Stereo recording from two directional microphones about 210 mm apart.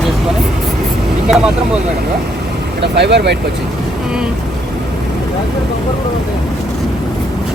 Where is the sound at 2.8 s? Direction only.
55° right (ahead or behind).